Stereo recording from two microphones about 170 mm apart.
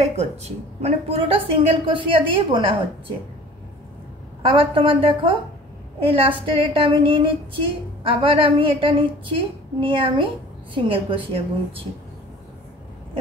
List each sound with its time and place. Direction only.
0.0 s a woman's voice: 40° right (ahead or behind)
4.5 s a woman's voice: 30° right (ahead or behind)